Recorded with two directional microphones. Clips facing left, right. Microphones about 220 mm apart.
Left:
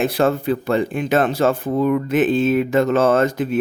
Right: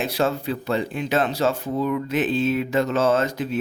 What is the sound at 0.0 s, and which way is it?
Speech, 55° left (ahead or behind).